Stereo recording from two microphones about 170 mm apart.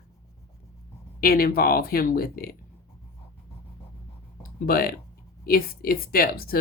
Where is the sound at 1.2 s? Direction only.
60° left (ahead or behind).